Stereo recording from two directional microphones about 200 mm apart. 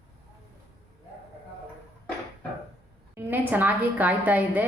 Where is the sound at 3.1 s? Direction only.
10° right (ahead or behind).